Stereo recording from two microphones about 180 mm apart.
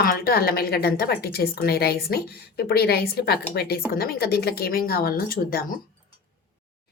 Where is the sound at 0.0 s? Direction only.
55° left (ahead or behind).